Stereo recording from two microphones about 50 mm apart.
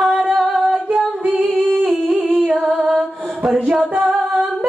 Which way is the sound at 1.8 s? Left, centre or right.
Centre.